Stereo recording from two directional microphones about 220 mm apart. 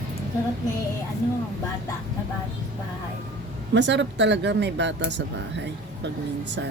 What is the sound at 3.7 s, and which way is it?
Speech, 55° right (ahead or behind).